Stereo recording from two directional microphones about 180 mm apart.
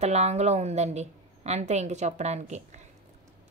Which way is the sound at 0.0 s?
40° right (ahead or behind).